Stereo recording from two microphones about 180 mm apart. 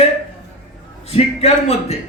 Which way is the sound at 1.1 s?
35° left (ahead or behind).